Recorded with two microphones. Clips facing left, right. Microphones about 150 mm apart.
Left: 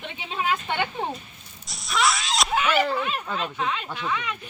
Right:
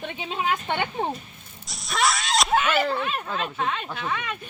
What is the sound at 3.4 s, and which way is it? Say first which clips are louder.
Speech: even; 50° right (ahead or behind).